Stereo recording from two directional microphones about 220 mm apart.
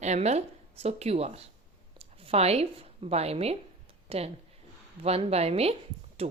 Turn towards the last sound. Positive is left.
turn(degrees=-25)  # may be behind; listen again after turning